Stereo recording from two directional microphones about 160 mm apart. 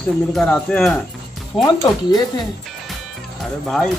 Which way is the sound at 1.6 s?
20° left (ahead or behind).